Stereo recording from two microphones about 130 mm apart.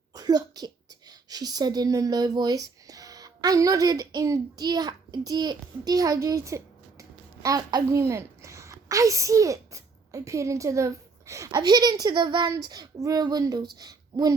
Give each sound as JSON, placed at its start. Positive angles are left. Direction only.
{"t": 0.1, "sound": "a child's voice", "side_deg": -30}